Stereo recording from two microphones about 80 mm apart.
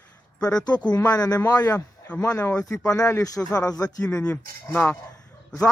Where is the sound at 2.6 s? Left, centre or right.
Left.